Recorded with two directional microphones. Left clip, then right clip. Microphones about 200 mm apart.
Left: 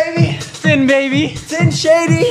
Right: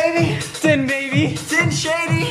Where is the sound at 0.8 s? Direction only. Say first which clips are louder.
Left 7 dB; 20° left (ahead or behind).